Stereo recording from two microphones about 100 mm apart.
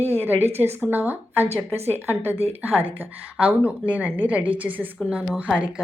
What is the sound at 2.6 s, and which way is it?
A woman's voice, 20° right (ahead or behind).